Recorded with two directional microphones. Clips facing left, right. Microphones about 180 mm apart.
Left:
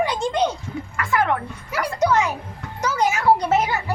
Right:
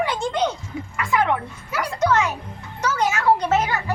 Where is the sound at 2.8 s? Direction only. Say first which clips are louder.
Left 1 dB; 10° left (ahead or behind).